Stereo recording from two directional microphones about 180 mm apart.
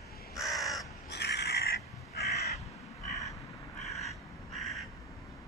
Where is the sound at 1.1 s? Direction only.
65° left (ahead or behind).